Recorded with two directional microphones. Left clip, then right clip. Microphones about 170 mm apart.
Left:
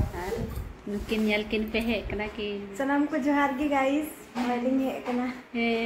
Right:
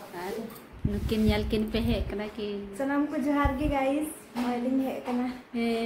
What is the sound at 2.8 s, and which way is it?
A woman's voice, centre (ahead or behind).